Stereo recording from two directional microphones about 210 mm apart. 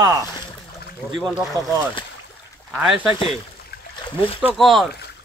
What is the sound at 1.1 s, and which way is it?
Speech, centre (ahead or behind).